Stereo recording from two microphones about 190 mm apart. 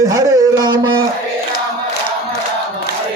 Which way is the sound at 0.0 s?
15° right (ahead or behind).